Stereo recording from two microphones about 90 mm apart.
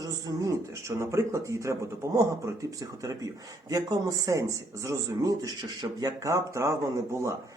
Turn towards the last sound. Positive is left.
turn(degrees=-35)  # may be behind; listen again after turning